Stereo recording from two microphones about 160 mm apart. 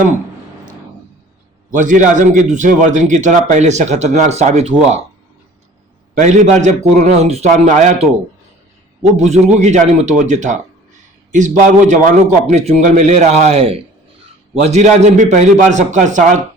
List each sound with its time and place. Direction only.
1.7 s a man's voice: 50° right (ahead or behind)
6.1 s a man's voice: 50° right (ahead or behind)
9.1 s a man's voice: 45° right (ahead or behind)